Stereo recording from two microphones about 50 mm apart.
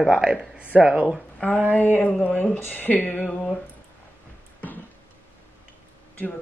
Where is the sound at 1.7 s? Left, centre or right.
Left.